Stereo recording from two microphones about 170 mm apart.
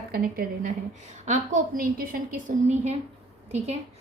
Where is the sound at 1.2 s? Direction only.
45° right (ahead or behind).